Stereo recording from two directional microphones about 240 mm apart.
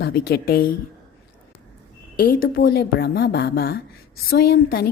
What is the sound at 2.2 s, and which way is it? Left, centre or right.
Speech, left.